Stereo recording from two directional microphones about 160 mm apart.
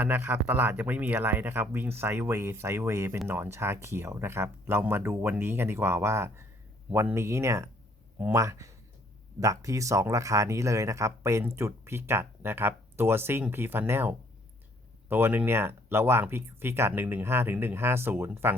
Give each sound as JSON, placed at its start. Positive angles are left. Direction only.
{"t": 0.0, "sound": "speech", "side_deg": -10}